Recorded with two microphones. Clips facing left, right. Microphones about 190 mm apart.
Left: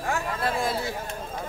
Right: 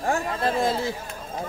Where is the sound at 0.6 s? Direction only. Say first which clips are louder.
Right 4 dB; 25° right (ahead or behind).